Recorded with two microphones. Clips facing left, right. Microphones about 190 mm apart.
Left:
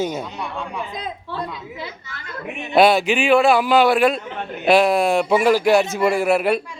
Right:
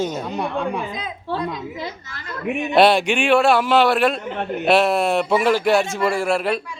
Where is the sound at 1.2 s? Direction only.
40° right (ahead or behind).